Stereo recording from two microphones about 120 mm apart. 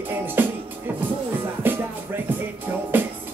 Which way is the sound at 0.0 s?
15° right (ahead or behind).